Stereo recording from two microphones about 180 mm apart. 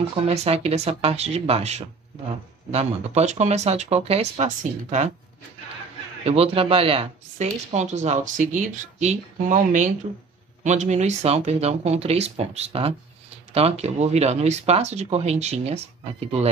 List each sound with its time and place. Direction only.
0.1 s speech: 35° right (ahead or behind)
6.2 s speech: 35° right (ahead or behind)